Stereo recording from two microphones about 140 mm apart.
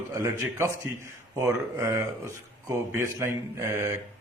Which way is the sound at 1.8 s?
20° right (ahead or behind).